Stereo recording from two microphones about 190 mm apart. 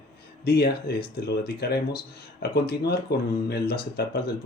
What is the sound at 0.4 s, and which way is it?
Speech, 55° left (ahead or behind).